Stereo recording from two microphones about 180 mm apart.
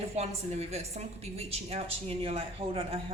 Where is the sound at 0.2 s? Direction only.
35° right (ahead or behind).